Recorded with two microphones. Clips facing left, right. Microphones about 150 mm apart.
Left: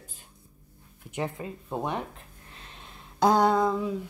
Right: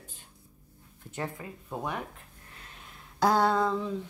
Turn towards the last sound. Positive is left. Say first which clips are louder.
# left 3 dB
turn(degrees=10)  # may be behind; listen again after turning